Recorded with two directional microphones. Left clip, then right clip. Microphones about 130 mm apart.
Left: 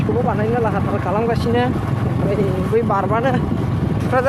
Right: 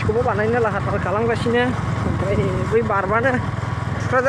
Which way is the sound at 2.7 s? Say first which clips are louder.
Even; centre (ahead or behind).